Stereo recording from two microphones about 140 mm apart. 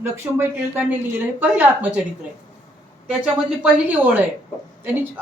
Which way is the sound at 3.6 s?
10° right (ahead or behind).